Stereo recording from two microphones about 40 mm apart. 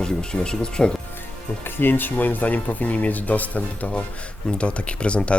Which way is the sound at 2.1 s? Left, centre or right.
Left.